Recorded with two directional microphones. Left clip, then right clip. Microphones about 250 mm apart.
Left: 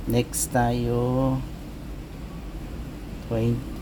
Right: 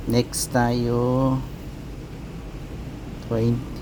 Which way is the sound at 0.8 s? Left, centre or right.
Centre.